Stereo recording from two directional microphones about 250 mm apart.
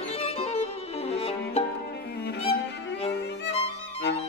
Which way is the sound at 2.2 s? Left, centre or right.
Left.